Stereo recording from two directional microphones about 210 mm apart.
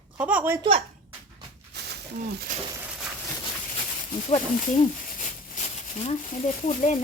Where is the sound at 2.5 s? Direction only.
35° right (ahead or behind).